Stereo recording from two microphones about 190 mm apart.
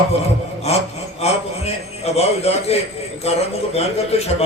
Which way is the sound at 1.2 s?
35° left (ahead or behind).